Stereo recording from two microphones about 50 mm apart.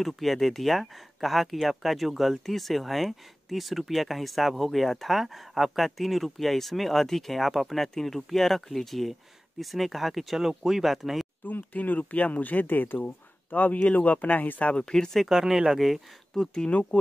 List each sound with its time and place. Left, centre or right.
0.0 s speech: centre
11.4 s speech: left
14.8 s speech: centre
15.2 s speech: centre
16.3 s speech: centre